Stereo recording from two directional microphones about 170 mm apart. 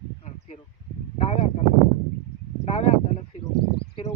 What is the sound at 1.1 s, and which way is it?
Speech, 40° left (ahead or behind).